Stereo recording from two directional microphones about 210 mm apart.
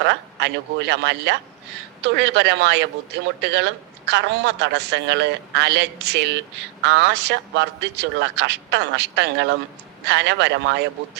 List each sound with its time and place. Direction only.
0.0 s a woman's voice: 55° right (ahead or behind)